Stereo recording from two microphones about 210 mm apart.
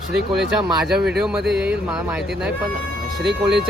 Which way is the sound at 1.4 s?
50° right (ahead or behind).